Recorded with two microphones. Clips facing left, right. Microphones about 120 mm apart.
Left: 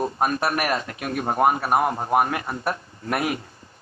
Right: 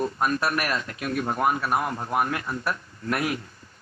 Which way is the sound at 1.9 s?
35° left (ahead or behind).